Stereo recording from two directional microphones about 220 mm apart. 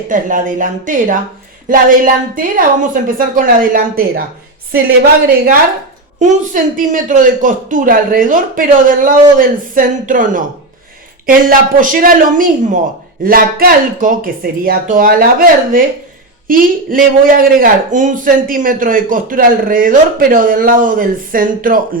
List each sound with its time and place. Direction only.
0.1 s a man's voice: 35° right (ahead or behind)
6.1 s a man's voice: 40° right (ahead or behind)